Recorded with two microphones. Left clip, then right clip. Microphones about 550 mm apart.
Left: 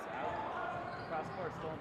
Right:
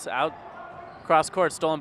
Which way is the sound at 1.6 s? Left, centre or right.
Right.